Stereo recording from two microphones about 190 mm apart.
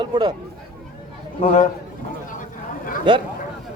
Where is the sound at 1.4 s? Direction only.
35° left (ahead or behind).